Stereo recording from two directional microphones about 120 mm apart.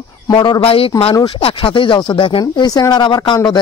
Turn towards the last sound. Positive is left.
turn(degrees=35)  # may be behind; listen again after turning